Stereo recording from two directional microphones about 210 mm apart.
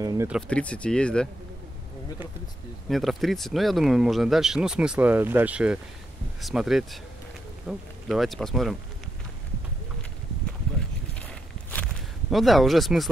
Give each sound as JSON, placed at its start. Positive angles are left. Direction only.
{"t": 0.0, "sound": "speech", "side_deg": -15}
{"t": 0.3, "sound": "speech", "side_deg": 5}
{"t": 2.9, "sound": "speech", "side_deg": 0}
{"t": 11.1, "sound": "walk", "side_deg": 5}
{"t": 12.3, "sound": "speech", "side_deg": 0}